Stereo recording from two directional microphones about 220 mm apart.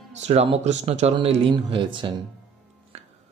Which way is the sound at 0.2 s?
30° right (ahead or behind).